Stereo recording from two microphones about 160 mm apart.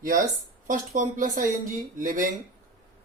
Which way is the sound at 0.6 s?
55° right (ahead or behind).